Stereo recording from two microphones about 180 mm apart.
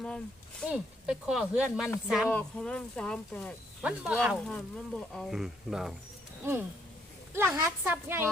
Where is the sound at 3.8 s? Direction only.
10° right (ahead or behind).